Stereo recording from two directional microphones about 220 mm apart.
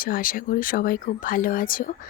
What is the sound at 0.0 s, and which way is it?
A woman's voice, 40° left (ahead or behind).